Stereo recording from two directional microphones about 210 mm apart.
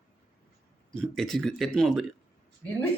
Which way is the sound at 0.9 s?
Centre (ahead or behind).